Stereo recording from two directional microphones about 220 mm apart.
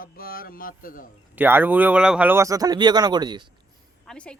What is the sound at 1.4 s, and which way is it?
Speech, 10° right (ahead or behind).